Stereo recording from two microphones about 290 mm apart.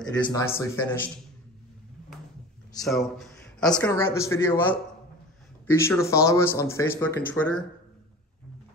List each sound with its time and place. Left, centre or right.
0.3 s speech: centre
2.9 s speech: centre